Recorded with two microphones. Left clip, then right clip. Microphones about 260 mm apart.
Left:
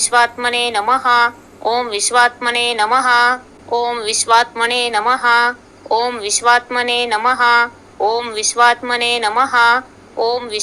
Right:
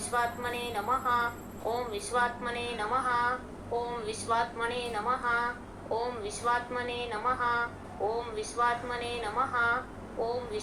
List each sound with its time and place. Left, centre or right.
0.0 s a woman's voice: left